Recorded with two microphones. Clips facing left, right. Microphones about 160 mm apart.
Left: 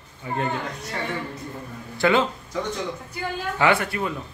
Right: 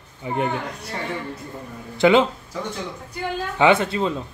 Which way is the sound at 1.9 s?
20° right (ahead or behind).